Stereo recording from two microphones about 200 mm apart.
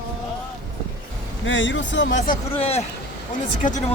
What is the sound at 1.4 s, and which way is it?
Speech, 70° left (ahead or behind).